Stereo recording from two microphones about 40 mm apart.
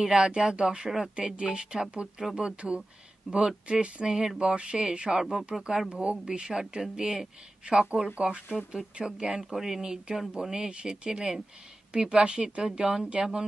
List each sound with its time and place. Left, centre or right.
0.0 s speech: right
0.8 s speech: centre
1.1 s speech: right
9.5 s speech: centre
9.8 s speech: right